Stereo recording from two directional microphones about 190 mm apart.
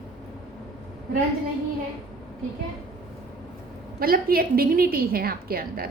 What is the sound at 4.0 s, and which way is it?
A woman's voice, 50° right (ahead or behind).